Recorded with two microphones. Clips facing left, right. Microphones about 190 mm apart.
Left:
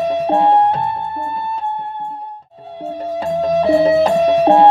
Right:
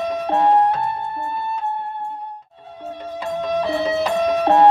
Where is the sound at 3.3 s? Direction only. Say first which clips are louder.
Left 7 dB; 40° left (ahead or behind).